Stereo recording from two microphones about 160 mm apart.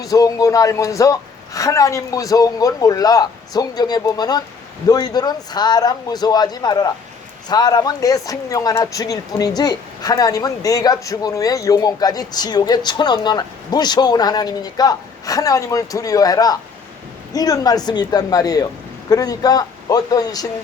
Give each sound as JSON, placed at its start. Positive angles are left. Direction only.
{"t": 0.0, "sound": "speech", "side_deg": 20}